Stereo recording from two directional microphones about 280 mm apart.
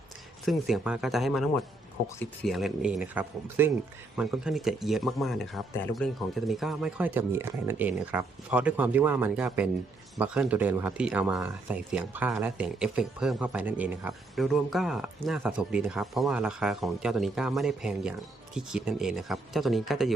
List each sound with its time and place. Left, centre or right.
0.4 s speech: centre